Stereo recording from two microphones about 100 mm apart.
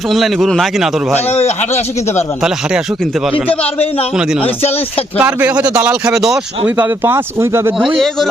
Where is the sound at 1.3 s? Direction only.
90° left.